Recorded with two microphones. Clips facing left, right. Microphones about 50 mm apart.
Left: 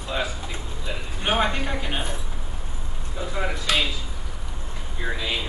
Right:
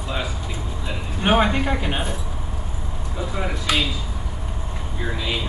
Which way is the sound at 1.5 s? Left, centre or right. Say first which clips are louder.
Right 5 dB; centre.